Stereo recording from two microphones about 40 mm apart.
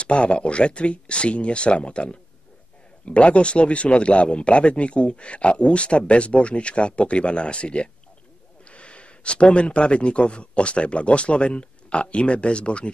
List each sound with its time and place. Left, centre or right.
0.0 s speech: left